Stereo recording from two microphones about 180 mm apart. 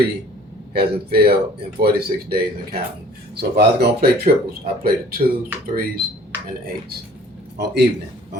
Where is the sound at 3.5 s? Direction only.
60° right (ahead or behind).